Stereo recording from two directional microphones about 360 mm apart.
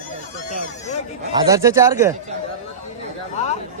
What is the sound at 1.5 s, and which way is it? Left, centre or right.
Speech, centre.